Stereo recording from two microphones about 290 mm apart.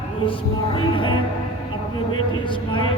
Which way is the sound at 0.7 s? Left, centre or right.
Centre.